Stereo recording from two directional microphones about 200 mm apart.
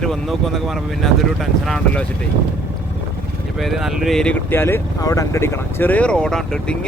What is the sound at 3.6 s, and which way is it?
Speech, centre (ahead or behind).